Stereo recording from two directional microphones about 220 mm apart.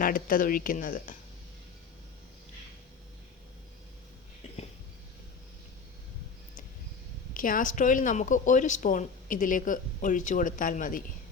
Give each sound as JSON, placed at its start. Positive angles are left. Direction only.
{"t": 0.0, "sound": "speech", "side_deg": 40}
{"t": 7.3, "sound": "speech", "side_deg": 40}